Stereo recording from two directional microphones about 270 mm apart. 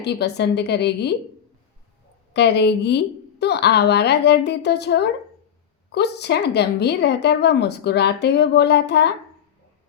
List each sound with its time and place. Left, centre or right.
0.0 s a woman's voice: left
2.3 s a woman's voice: left